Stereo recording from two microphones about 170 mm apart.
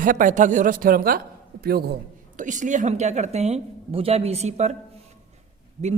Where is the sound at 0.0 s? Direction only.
50° right (ahead or behind).